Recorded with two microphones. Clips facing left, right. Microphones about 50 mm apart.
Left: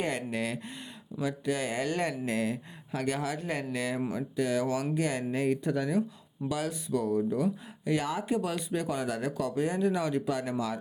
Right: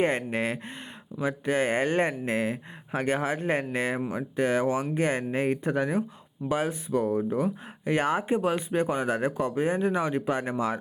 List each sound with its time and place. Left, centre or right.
0.0 s speech: right